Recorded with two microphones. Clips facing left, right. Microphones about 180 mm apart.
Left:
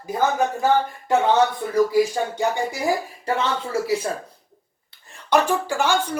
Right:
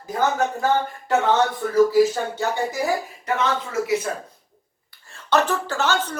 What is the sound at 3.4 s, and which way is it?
Speech, 35° left (ahead or behind).